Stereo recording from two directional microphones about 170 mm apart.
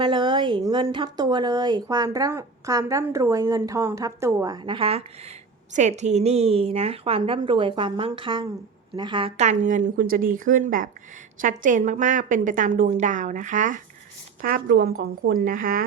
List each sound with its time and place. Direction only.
0.0 s a woman's voice: 25° right (ahead or behind)
9.4 s a woman's voice: 45° right (ahead or behind)
14.4 s speech: 60° right (ahead or behind)